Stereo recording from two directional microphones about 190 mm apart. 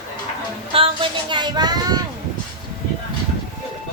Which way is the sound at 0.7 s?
25° right (ahead or behind).